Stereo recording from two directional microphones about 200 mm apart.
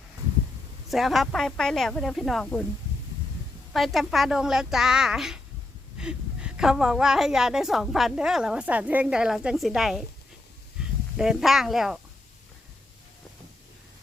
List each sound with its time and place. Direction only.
0.9 s a woman's voice: centre (ahead or behind)
3.7 s a woman's voice: centre (ahead or behind)